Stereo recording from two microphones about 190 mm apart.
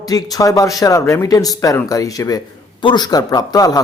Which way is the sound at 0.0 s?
20° left (ahead or behind).